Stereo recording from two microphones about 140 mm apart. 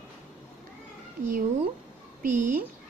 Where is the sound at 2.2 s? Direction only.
90° right.